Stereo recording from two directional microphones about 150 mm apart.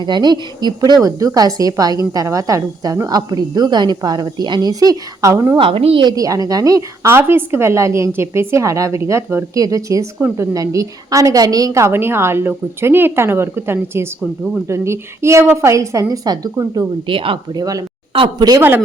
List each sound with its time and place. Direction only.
0.0 s a woman's voice: 30° right (ahead or behind)
5.5 s a woman's voice: 40° right (ahead or behind); by 14.1 s 15° right (ahead or behind)
14.2 s speech: 5° right (ahead or behind)
14.7 s a woman's voice: 20° right (ahead or behind)
17.1 s a woman's voice: 35° right (ahead or behind)